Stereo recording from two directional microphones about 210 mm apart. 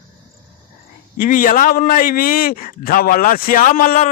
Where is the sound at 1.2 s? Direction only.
40° left (ahead or behind).